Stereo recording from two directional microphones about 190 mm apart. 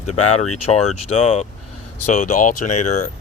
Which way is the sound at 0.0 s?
35° left (ahead or behind).